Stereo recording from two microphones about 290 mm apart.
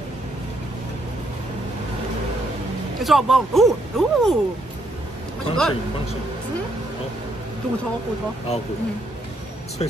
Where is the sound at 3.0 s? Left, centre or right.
Centre.